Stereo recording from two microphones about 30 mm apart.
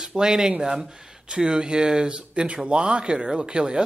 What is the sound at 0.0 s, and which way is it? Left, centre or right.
Speech, right.